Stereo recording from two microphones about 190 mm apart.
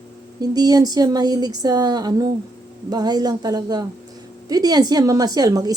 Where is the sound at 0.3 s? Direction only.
20° right (ahead or behind).